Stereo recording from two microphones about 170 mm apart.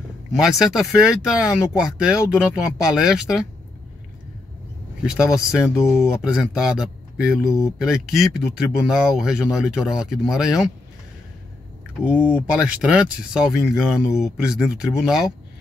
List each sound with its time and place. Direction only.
0.4 s speech: centre (ahead or behind)
5.2 s speech: 5° right (ahead or behind)
12.0 s speech: 10° right (ahead or behind)